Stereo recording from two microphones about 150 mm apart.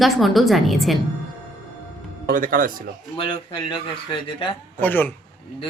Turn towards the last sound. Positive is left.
turn(degrees=15)  # may be behind; listen again after turning